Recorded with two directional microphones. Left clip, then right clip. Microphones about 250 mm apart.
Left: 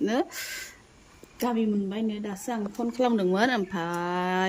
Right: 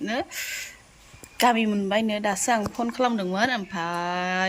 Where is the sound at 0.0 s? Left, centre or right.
Centre.